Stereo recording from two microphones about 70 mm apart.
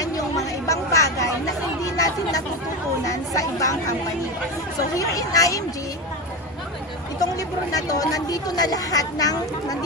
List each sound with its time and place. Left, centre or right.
0.0 s a sound: left
1.8 s chatter: left
4.9 s speech: left
7.3 s speech: left